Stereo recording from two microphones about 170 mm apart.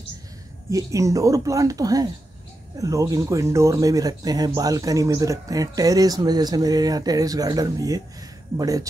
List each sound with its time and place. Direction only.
0.7 s speech: 20° right (ahead or behind)